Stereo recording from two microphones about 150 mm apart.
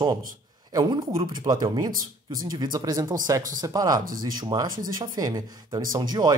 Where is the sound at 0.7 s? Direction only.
30° right (ahead or behind).